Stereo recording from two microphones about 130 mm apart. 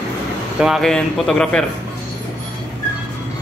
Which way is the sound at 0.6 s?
Centre (ahead or behind).